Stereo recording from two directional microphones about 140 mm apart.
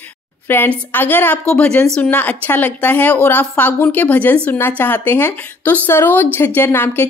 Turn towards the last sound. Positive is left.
turn(degrees=15)  # may be behind; listen again after turning